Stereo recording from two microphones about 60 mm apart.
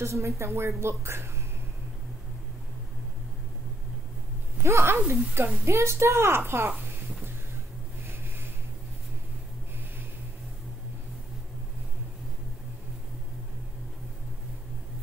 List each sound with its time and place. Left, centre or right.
0.0 s a woman's voice: right
4.6 s a woman's voice: right